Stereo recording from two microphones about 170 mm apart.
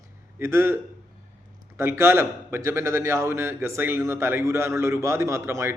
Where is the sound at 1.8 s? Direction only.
15° right (ahead or behind).